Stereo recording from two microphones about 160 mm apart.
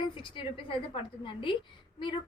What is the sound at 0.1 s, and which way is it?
A woman's voice, 30° left (ahead or behind).